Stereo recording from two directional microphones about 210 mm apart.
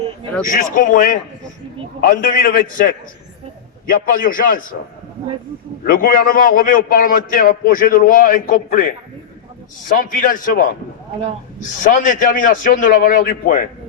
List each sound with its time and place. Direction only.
0.4 s a man's voice: 40° left (ahead or behind)
5.8 s a man's voice: 40° left (ahead or behind)
10.0 s a man's voice: 40° left (ahead or behind)